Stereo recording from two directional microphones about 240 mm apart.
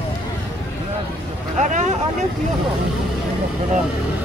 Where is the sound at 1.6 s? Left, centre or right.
Right.